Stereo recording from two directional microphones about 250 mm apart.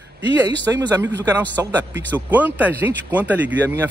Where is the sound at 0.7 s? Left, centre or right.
Centre.